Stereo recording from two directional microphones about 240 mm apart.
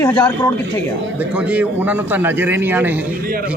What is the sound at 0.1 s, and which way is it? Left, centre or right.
Speech, centre.